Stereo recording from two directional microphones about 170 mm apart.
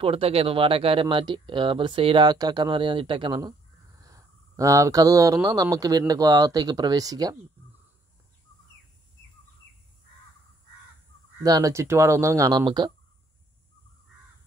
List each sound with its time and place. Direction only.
0.0 s speech: 35° right (ahead or behind)
11.4 s speech: 20° right (ahead or behind)